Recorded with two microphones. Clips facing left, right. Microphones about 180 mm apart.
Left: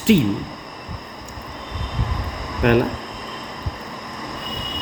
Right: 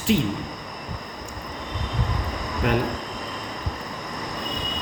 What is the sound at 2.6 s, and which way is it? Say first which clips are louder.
Speech: left 7 dB; 70° left (ahead or behind).